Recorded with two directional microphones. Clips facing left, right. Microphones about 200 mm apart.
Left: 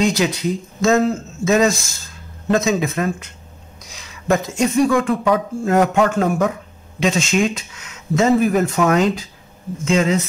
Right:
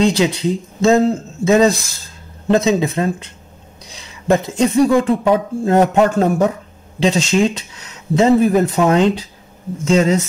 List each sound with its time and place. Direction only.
0.0 s speech: 30° right (ahead or behind)